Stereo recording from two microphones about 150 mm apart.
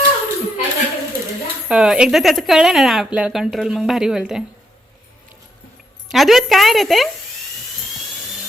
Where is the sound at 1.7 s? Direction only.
5° right (ahead or behind).